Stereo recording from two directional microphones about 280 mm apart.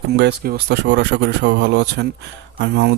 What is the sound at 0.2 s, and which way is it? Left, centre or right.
Speech, right.